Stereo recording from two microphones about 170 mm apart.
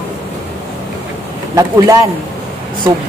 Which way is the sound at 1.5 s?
20° right (ahead or behind).